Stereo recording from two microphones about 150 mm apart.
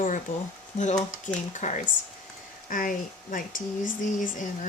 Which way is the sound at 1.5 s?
55° left (ahead or behind).